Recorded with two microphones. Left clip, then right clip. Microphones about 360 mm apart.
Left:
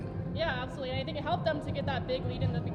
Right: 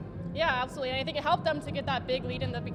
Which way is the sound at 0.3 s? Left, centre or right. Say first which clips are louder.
Right 5 dB; right.